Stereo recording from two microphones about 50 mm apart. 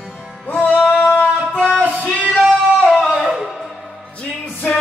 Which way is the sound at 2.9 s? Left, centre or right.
Centre.